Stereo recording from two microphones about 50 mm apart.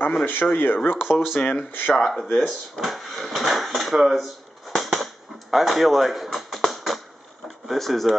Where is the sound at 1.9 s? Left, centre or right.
Centre.